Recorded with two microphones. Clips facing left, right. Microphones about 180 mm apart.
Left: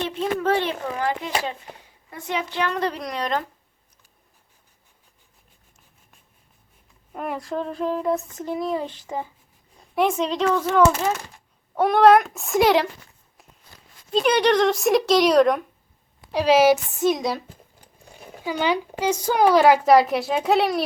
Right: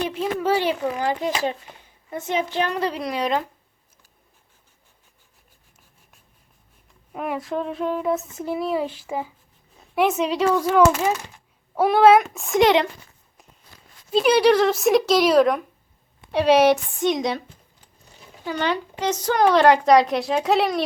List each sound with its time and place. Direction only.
0.1 s a child's voice: 5° right (ahead or behind)
2.0 s a child's voice: 20° right (ahead or behind)
2.7 s a woman's voice: 5° right (ahead or behind)
7.1 s a woman's voice: centre (ahead or behind)
14.1 s a woman's voice: 5° right (ahead or behind)
18.4 s a woman's voice: 10° left (ahead or behind)